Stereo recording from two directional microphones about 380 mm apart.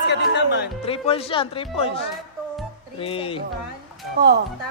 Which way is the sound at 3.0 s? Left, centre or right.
Centre.